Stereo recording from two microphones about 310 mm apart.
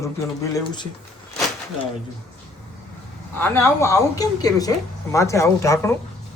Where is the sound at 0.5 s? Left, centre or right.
Centre.